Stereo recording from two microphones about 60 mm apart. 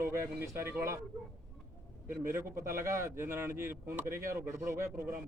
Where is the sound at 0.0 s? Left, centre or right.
Right.